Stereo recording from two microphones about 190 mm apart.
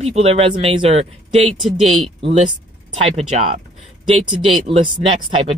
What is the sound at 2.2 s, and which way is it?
Speech, 30° right (ahead or behind).